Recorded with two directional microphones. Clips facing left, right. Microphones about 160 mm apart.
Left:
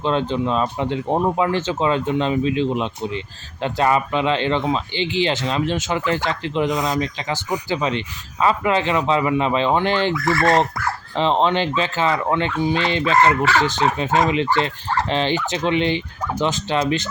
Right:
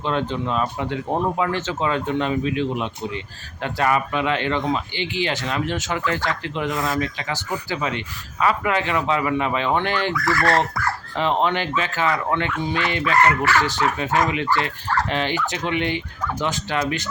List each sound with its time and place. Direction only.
0.0 s speech: 20° left (ahead or behind)